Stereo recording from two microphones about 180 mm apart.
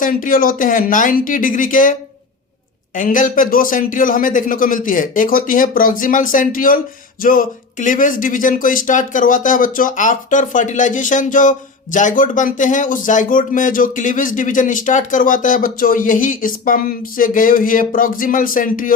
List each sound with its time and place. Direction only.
0.0 s speech: 50° left (ahead or behind)